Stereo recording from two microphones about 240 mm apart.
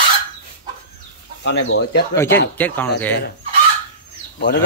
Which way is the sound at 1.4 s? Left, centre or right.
Left.